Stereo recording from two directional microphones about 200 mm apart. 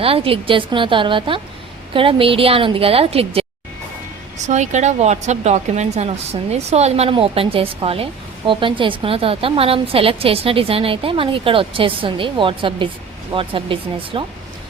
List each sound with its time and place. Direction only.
0.0 s a woman's voice: 30° right (ahead or behind)